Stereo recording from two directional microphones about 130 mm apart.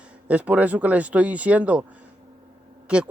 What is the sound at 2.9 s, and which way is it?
Speech, 5° right (ahead or behind).